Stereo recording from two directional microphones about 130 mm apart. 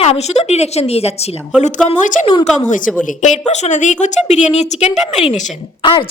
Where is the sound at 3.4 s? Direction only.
60° left (ahead or behind).